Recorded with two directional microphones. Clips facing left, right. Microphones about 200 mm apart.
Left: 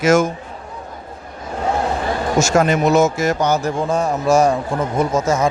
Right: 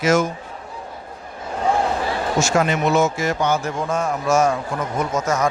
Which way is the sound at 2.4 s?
45° left (ahead or behind).